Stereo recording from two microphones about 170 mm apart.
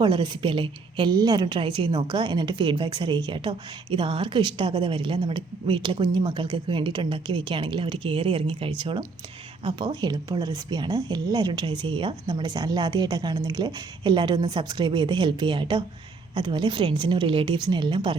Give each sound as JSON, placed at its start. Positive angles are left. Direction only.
{"t": 0.0, "sound": "a woman's voice", "side_deg": -25}